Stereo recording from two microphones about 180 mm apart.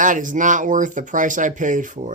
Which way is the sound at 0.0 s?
45° right (ahead or behind).